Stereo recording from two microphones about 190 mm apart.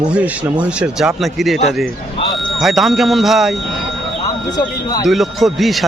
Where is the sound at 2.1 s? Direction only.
25° left (ahead or behind).